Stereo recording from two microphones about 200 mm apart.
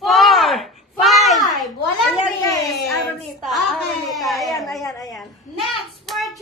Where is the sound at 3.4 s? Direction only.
Centre (ahead or behind).